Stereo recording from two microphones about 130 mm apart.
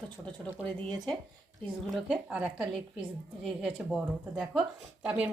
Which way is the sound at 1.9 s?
Centre (ahead or behind).